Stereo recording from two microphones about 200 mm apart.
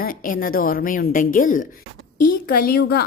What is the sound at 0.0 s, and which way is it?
A woman's voice, 45° left (ahead or behind).